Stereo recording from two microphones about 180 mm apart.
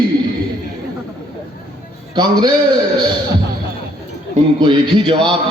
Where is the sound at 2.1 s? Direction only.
25° right (ahead or behind).